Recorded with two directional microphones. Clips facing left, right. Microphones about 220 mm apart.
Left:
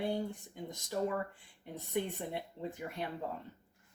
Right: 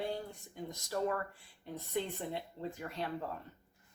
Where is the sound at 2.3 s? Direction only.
15° left (ahead or behind).